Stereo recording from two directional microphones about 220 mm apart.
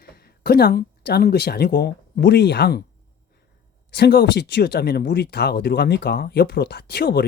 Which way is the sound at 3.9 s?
45° left (ahead or behind).